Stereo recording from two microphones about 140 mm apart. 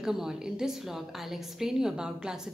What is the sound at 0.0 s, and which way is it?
A woman's voice, 5° right (ahead or behind).